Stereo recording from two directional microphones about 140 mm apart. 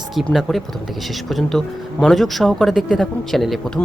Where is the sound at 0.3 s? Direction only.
Centre (ahead or behind).